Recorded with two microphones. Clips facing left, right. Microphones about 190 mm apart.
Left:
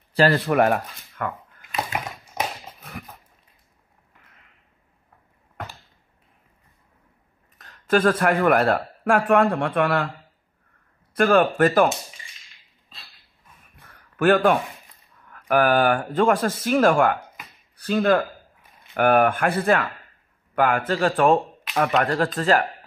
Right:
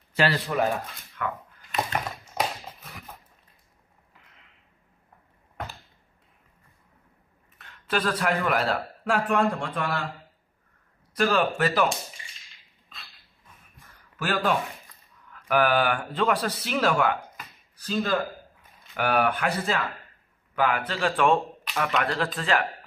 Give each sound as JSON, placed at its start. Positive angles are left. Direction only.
{"t": 0.1, "sound": "a sound", "side_deg": 35}
{"t": 0.5, "sound": "speech", "side_deg": 65}
{"t": 1.2, "sound": "speech", "side_deg": 45}
{"t": 1.7, "sound": "a sound", "side_deg": 5}
{"t": 2.4, "sound": "dog", "side_deg": 15}
{"t": 7.5, "sound": "speech", "side_deg": 40}
{"t": 11.1, "sound": "speech", "side_deg": 55}
{"t": 13.7, "sound": "a sound", "side_deg": 60}
{"t": 15.2, "sound": "speech", "side_deg": 50}
{"t": 17.7, "sound": "speech", "side_deg": 60}
{"t": 18.9, "sound": "speech", "side_deg": 50}